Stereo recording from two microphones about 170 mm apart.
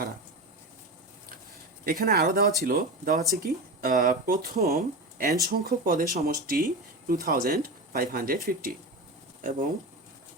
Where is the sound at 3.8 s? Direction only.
50° right (ahead or behind).